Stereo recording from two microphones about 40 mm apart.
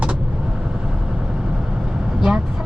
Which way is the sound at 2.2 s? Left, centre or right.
Centre.